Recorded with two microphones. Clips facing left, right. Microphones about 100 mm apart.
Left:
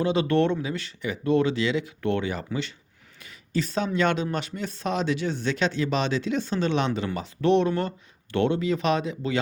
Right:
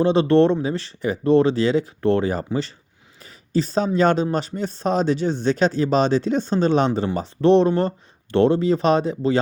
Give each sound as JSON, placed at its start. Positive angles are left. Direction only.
{"t": 0.0, "sound": "speech", "side_deg": -35}